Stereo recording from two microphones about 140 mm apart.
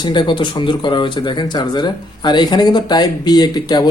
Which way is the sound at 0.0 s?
35° left (ahead or behind).